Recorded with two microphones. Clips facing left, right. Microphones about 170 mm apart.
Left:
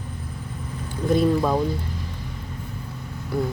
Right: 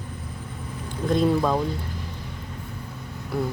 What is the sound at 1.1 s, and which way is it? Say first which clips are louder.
Speech: left 1 dB; 5° left (ahead or behind).